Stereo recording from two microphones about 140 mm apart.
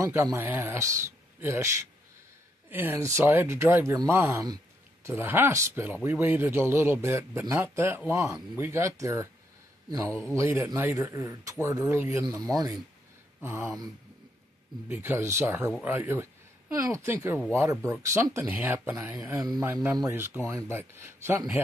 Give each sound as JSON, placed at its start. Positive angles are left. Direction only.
{"t": 0.0, "sound": "speech", "side_deg": -20}
{"t": 2.7, "sound": "a man's voice", "side_deg": -15}
{"t": 14.9, "sound": "a man's voice", "side_deg": -15}